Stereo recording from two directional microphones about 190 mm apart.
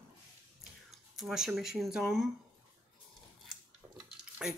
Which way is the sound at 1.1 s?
Centre (ahead or behind).